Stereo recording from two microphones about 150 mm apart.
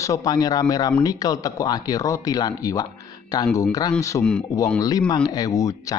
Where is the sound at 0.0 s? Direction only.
20° left (ahead or behind).